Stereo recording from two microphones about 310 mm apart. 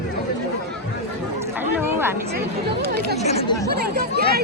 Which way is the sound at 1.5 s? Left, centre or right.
Centre.